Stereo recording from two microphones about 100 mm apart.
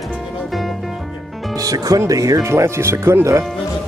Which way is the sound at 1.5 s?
35° right (ahead or behind).